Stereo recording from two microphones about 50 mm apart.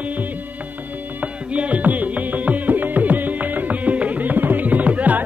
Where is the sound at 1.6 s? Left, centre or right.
Right.